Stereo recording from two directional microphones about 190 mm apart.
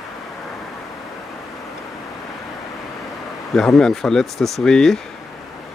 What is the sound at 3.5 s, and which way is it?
Speech, 5° left (ahead or behind).